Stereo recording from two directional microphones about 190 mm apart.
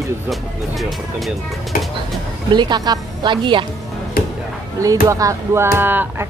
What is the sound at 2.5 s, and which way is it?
A woman's voice, 25° right (ahead or behind).